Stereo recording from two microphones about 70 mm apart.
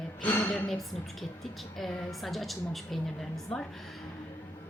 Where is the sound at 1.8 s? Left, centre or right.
Centre.